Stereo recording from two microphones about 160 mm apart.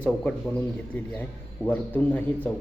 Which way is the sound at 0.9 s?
5° left (ahead or behind).